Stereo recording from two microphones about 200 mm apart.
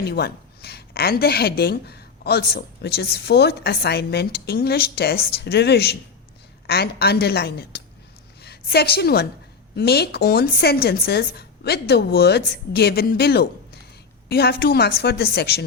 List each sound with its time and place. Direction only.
0.0 s a woman's voice: 55° left (ahead or behind)